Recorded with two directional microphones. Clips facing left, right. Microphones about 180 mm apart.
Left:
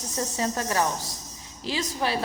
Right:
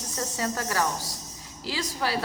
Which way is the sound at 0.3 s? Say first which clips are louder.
Left 2 dB; 25° left (ahead or behind).